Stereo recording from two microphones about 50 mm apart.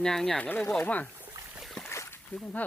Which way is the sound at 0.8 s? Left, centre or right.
Left.